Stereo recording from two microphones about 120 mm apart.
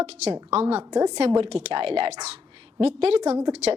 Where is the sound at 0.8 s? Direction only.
35° right (ahead or behind).